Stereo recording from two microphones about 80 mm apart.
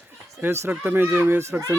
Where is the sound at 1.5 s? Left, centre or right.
Right.